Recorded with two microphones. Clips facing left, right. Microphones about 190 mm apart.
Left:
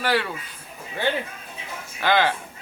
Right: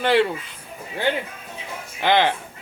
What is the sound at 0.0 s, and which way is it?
Speech, 25° right (ahead or behind).